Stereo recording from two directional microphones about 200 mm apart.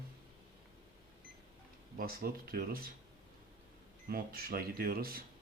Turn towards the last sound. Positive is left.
turn(degrees=-50)  # may be behind; listen again after turning